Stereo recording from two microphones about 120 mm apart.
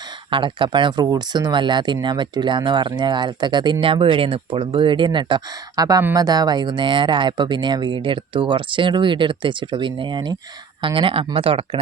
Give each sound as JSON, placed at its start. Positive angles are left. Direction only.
{"t": 0.3, "sound": "speech", "side_deg": -45}